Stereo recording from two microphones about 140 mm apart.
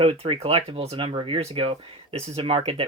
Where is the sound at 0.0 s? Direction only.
40° right (ahead or behind).